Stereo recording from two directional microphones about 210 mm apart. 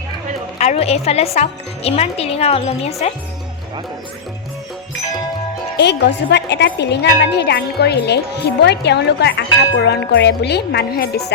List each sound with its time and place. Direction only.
0.6 s speech: 30° left (ahead or behind)
5.7 s a woman's voice: 55° left (ahead or behind)